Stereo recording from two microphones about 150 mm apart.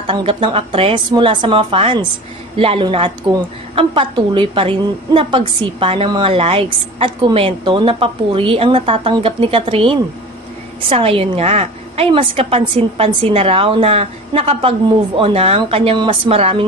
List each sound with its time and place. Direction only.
0.0 s a woman's voice: 35° right (ahead or behind)